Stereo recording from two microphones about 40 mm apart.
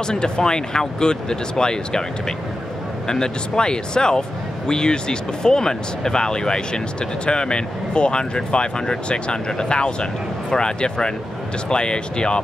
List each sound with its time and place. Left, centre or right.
0.0 s speech: centre